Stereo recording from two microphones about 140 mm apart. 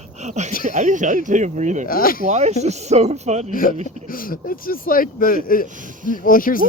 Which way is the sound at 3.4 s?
80° left.